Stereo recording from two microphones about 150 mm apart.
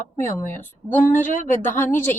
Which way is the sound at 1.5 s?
15° left (ahead or behind).